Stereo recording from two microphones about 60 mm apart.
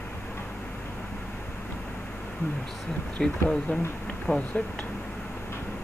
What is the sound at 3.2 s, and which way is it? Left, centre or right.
Speech, centre.